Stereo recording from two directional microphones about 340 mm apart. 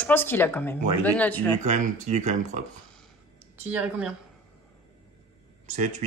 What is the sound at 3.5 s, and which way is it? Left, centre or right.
Speech, centre.